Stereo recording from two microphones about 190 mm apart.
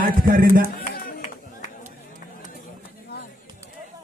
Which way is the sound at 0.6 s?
45° left (ahead or behind).